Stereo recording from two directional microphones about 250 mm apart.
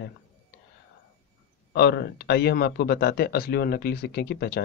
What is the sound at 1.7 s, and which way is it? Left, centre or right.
A man's voice, left.